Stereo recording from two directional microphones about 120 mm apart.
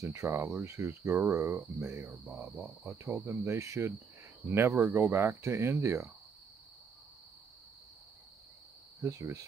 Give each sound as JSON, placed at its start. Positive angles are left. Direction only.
{"t": 0.0, "sound": "speech", "side_deg": -25}
{"t": 9.0, "sound": "speech", "side_deg": -25}